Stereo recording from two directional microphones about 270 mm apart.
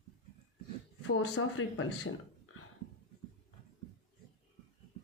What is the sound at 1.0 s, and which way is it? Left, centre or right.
Speech, left.